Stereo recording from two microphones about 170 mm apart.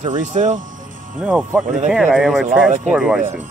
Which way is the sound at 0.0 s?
45° right (ahead or behind).